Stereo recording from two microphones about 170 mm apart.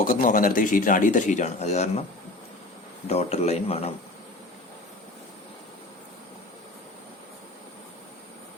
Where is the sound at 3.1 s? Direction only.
40° left (ahead or behind).